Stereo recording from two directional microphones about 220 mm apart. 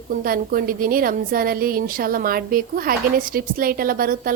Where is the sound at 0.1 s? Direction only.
40° right (ahead or behind).